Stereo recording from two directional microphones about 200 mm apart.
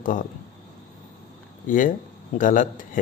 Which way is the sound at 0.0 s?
40° left (ahead or behind).